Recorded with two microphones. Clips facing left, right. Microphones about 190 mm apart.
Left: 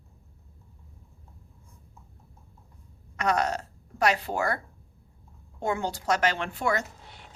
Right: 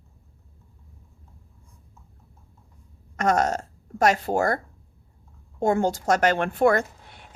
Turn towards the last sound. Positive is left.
turn(degrees=-55)  # may be behind; listen again after turning